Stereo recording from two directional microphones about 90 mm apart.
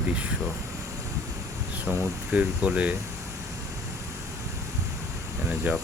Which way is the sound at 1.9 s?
10° right (ahead or behind).